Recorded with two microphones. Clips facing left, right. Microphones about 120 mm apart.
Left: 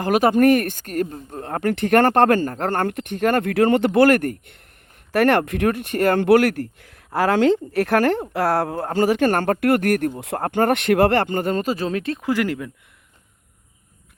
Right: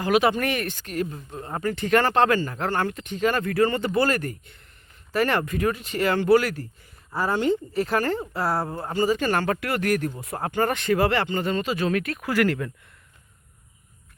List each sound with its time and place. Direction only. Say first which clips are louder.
0.0 s speech: left 5 dB; 45° left (ahead or behind)
1.5 s speech: left 4 dB; 70° left (ahead or behind)
10.2 s speech: left 5 dB; 75° left (ahead or behind); by 12.7 s 15° left (ahead or behind)